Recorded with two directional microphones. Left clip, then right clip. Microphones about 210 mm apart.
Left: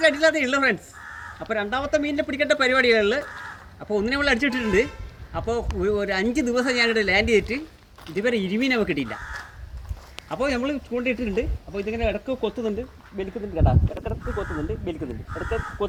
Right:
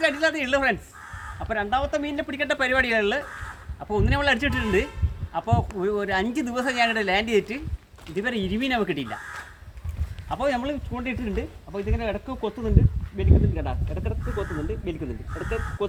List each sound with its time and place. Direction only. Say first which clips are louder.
0.0 s a man's voice: left 4 dB; 10° right (ahead or behind)
10.2 s a man's voice: even; 10° right (ahead or behind)